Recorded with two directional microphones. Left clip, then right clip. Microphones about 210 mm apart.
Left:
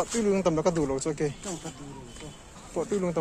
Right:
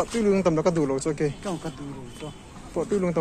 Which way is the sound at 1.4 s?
15° right (ahead or behind).